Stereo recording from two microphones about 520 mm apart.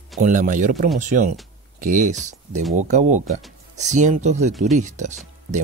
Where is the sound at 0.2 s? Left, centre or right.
Centre.